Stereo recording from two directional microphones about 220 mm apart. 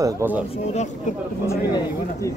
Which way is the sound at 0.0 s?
10° right (ahead or behind).